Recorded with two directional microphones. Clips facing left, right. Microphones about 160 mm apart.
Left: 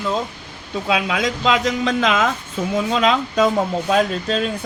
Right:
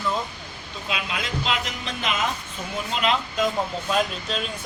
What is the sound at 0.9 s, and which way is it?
Speech, 90° left.